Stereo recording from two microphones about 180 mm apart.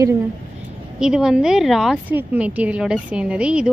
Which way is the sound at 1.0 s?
5° right (ahead or behind).